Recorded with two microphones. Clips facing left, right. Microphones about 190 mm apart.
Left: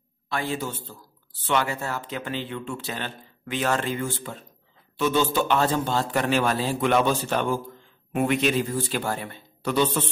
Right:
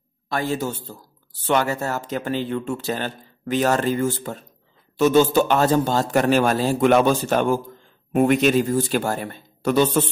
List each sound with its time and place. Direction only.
0.3 s speech: 40° right (ahead or behind)